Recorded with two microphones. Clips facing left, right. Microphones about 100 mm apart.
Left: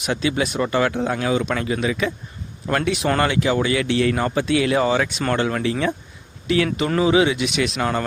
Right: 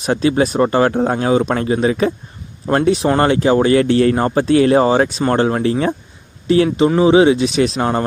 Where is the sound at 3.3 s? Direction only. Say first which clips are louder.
Right 7 dB; 35° right (ahead or behind).